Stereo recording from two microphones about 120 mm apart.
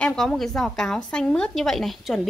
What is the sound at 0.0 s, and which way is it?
A woman's voice, 5° left (ahead or behind).